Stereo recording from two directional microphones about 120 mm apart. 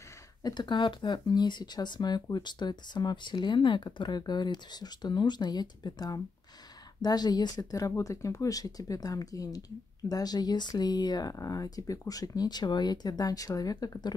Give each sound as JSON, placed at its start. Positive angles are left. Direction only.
{"t": 0.4, "sound": "speech", "side_deg": 35}